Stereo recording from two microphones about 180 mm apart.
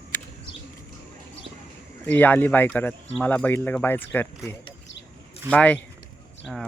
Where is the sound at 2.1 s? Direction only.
10° left (ahead or behind).